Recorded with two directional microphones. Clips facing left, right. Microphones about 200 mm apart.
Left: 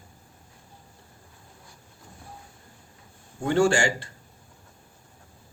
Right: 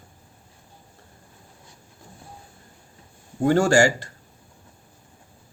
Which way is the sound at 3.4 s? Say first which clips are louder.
Right 4 dB; 40° right (ahead or behind).